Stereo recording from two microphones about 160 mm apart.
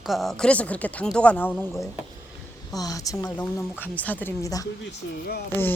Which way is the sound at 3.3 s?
10° left (ahead or behind).